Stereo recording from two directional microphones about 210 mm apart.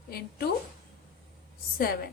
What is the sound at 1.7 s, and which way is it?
Speech, 45° left (ahead or behind).